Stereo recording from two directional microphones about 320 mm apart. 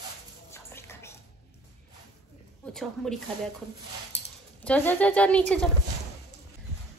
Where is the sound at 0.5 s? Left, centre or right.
Centre.